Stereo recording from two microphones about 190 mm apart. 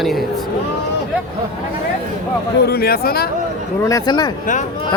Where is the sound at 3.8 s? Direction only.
20° left (ahead or behind).